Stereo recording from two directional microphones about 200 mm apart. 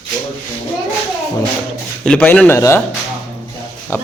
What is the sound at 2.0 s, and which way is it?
Speech, 5° left (ahead or behind).